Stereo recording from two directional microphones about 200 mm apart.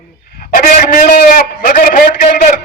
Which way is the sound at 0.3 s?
45° left (ahead or behind).